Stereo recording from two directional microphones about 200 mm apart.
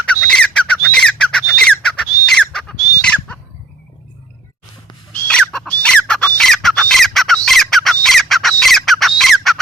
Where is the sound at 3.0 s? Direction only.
5° left (ahead or behind).